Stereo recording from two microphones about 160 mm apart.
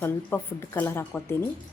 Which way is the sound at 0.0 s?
15° left (ahead or behind).